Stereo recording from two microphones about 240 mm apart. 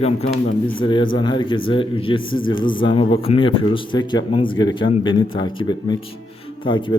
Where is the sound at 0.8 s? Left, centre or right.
Centre.